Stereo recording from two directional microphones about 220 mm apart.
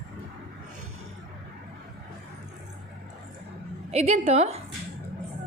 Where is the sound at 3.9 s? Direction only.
30° right (ahead or behind).